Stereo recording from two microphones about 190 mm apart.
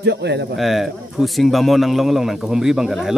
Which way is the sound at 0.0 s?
60° right (ahead or behind).